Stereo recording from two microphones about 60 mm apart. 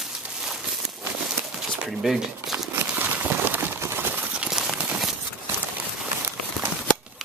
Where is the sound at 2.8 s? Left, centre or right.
Right.